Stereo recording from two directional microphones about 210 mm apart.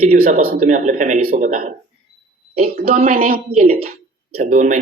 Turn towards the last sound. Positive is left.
turn(degrees=-35)  # may be behind; listen again after turning